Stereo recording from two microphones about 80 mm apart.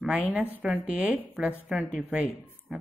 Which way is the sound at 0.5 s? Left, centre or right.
Centre.